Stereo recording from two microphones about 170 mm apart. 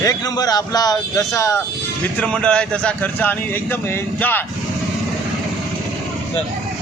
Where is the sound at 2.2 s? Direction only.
5° left (ahead or behind).